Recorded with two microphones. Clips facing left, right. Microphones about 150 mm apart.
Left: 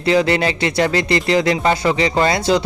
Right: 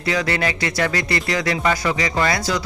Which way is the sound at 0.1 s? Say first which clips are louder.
Left 6 dB; 25° left (ahead or behind).